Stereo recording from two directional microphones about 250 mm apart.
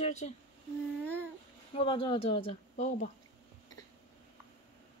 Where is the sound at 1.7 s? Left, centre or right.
Left.